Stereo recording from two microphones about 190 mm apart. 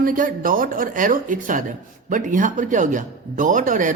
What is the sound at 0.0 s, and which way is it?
A man's voice, 45° right (ahead or behind).